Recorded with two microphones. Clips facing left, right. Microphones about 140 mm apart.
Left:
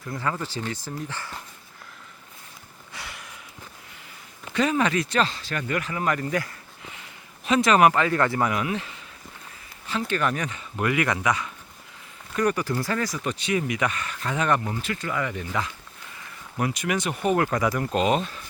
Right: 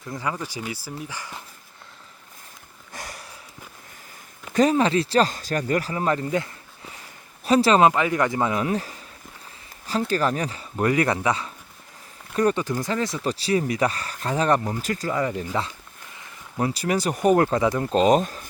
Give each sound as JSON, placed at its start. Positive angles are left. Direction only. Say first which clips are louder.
{"t": 0.1, "sound": "speech", "louder": "even", "side_deg": -15}
{"t": 2.9, "sound": "a sound", "louder": "right 3 dB", "side_deg": -40}
{"t": 4.5, "sound": "a man's voice", "louder": "right 4 dB", "side_deg": -35}
{"t": 7.4, "sound": "a man's voice", "louder": "right 2 dB", "side_deg": -35}
{"t": 10.1, "sound": "speech", "louder": "right 1 dB", "side_deg": -35}